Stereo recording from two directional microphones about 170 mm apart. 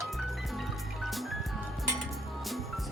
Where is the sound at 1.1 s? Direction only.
Centre (ahead or behind).